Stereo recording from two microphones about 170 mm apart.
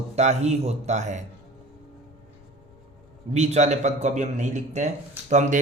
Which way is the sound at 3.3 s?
40° right (ahead or behind).